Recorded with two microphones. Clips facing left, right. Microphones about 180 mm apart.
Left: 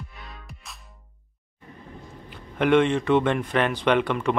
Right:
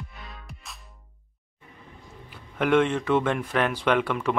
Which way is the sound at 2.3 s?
5° right (ahead or behind).